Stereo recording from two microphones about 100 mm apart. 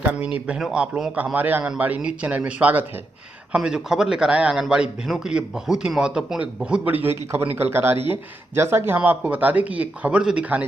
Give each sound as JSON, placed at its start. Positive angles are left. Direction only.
{"t": 0.5, "sound": "a man's voice", "side_deg": -5}